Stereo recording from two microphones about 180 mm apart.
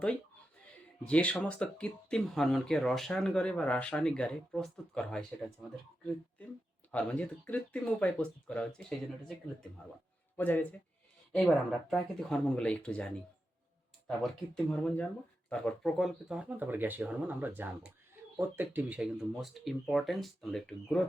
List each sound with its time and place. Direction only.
1.0 s speech: 5° left (ahead or behind)
6.9 s speech: 10° left (ahead or behind)
10.3 s speech: 10° left (ahead or behind)